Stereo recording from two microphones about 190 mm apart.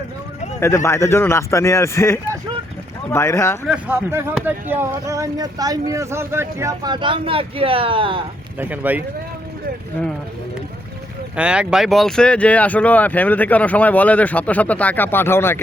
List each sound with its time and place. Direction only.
0.6 s speech: 15° left (ahead or behind)
3.7 s speech: 10° right (ahead or behind); by 8.2 s 25° right (ahead or behind)
8.5 s speech: 10° right (ahead or behind)
11.3 s speech: 5° right (ahead or behind); by 15.6 s 10° left (ahead or behind)